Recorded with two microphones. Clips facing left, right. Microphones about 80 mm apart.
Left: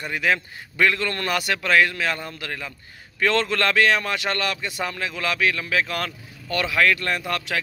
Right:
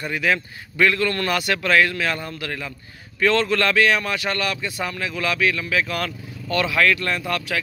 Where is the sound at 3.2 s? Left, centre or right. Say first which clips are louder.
Right 2 dB; left.